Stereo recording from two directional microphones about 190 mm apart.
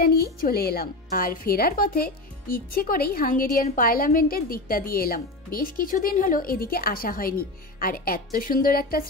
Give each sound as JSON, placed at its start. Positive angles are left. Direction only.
{"t": 0.0, "sound": "speech", "side_deg": 55}